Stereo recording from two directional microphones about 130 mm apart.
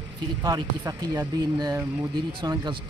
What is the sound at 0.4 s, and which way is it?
Speech, 30° right (ahead or behind).